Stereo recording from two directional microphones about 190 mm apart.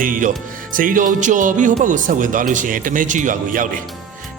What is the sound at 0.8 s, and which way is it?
Speech, 45° right (ahead or behind).